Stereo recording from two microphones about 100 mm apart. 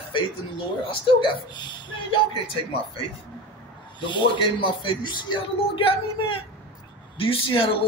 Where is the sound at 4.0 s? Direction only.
50° left (ahead or behind).